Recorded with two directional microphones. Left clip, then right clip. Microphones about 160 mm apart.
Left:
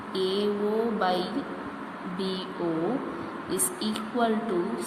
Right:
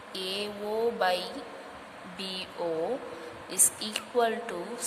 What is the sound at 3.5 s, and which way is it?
Speech, 65° right (ahead or behind).